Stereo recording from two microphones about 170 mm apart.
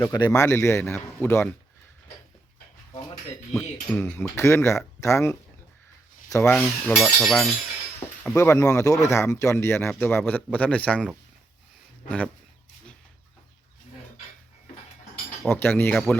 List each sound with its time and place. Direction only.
0.0 s speech: 20° left (ahead or behind)
3.5 s speech: 10° left (ahead or behind)
6.4 s speech: 10° left (ahead or behind)
6.9 s speech: centre (ahead or behind)
8.2 s speech: 15° left (ahead or behind)
12.0 s speech: 10° left (ahead or behind)
15.4 s speech: 10° left (ahead or behind)